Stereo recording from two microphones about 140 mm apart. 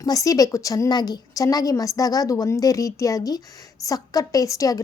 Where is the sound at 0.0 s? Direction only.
25° left (ahead or behind).